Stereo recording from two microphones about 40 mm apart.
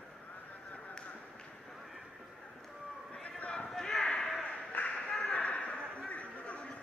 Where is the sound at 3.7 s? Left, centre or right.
Centre.